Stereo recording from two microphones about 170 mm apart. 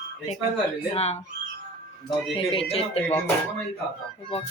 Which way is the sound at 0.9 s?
35° left (ahead or behind).